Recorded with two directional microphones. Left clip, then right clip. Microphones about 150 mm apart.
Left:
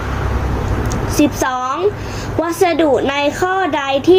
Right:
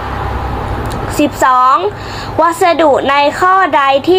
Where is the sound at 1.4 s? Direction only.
20° left (ahead or behind).